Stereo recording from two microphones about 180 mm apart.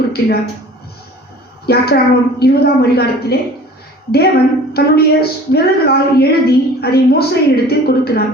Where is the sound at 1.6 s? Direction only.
60° left (ahead or behind).